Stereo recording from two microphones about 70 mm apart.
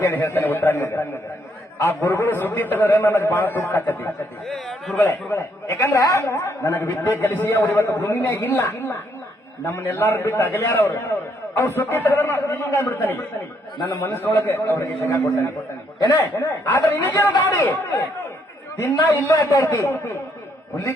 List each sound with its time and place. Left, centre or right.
0.0 s a man's voice: left
4.4 s a sound: centre
4.9 s a man's voice: left
18.8 s a man's voice: left
19.3 s a man's voice: left